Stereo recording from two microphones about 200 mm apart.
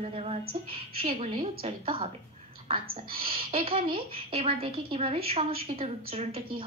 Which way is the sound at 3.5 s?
30° right (ahead or behind).